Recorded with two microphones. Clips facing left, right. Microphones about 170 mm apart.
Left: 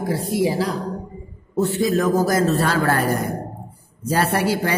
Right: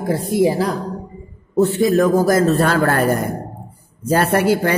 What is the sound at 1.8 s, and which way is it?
A man's voice, 55° right (ahead or behind).